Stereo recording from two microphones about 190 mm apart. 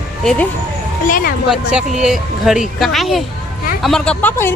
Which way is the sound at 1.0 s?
45° left (ahead or behind).